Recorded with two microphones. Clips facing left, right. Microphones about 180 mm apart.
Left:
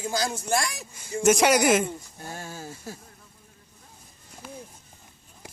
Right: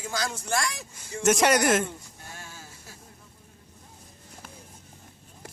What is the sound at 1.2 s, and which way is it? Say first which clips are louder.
Speech: left 2 dB; centre (ahead or behind).